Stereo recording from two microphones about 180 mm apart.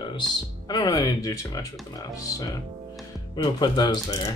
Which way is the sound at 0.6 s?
20° left (ahead or behind).